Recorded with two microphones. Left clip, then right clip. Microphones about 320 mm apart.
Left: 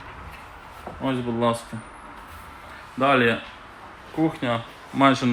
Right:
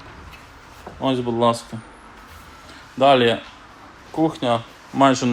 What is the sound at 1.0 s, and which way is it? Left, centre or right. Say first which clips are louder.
Speech: right 5 dB; centre.